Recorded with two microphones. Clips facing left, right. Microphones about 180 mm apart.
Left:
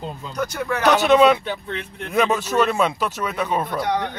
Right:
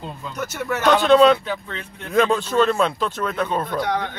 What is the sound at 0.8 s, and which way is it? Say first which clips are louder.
Speech: right 1 dB; 10° left (ahead or behind).